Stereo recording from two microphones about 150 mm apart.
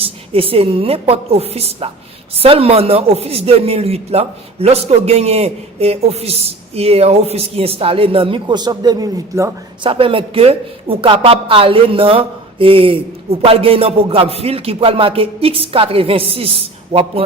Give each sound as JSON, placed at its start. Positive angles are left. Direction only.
{"t": 0.0, "sound": "a woman's voice", "side_deg": -40}
{"t": 9.8, "sound": "a woman's voice", "side_deg": -35}